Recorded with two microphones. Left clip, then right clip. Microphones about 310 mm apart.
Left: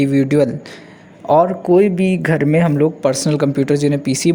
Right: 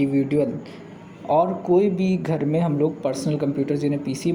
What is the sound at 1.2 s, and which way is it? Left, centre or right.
A man's voice, left.